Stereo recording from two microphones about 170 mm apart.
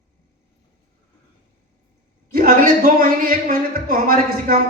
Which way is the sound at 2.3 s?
55° right (ahead or behind).